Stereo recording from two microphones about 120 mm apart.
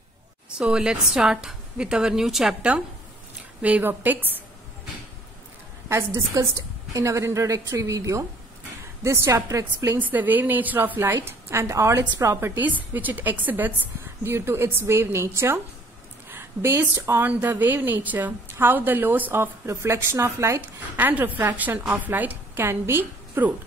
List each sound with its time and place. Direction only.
0.6 s a woman's voice: 5° right (ahead or behind)
5.9 s a woman's voice: 25° right (ahead or behind)
9.9 s a woman's voice: 15° right (ahead or behind)